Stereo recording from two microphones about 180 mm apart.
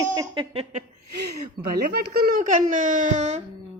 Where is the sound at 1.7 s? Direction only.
60° right (ahead or behind); by 3.4 s 40° right (ahead or behind).